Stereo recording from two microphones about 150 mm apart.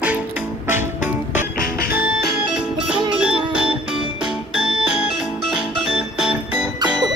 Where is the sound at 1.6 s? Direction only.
90° left.